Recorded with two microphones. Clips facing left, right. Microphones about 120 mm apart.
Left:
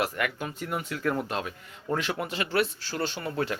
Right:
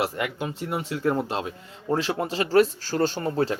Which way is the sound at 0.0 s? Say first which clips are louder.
Right 2 dB; 25° right (ahead or behind).